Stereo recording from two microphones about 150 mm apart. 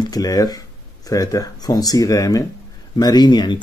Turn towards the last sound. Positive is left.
turn(degrees=30)  # may be behind; listen again after turning